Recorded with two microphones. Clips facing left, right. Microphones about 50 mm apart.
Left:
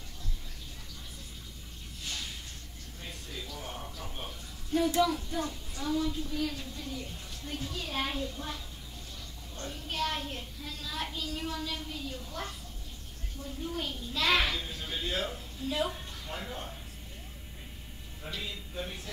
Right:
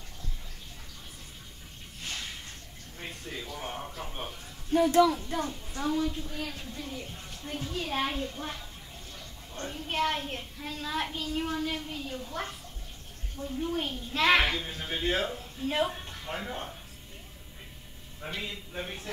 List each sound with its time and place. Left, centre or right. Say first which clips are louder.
3.0 s a sound: right 4 dB; right
4.7 s a child's voice: right 5 dB; right
13.6 s a child's voice: right 4 dB; right
18.2 s a child's voice: right 3 dB; right